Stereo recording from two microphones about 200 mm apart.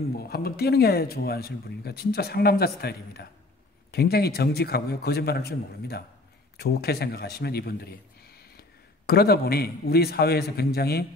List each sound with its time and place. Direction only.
0.1 s a man's voice: 50° left (ahead or behind)